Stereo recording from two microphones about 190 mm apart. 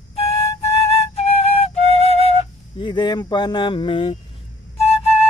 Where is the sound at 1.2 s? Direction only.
30° left (ahead or behind).